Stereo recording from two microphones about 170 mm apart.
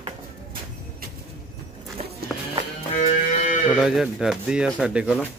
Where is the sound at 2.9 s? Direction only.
45° left (ahead or behind).